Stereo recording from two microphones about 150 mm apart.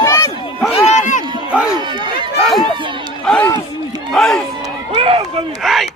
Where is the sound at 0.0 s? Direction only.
20° left (ahead or behind).